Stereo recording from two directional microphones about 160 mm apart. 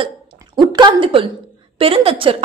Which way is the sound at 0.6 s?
30° right (ahead or behind).